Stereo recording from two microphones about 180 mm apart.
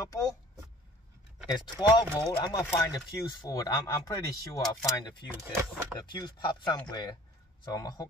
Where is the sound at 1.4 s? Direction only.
25° left (ahead or behind).